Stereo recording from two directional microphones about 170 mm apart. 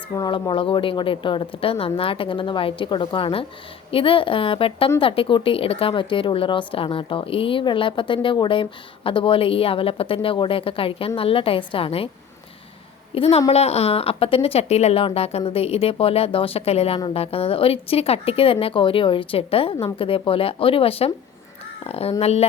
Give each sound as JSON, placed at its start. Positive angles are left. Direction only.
{"t": 0.2, "sound": "speech", "side_deg": 25}
{"t": 13.1, "sound": "speech", "side_deg": 35}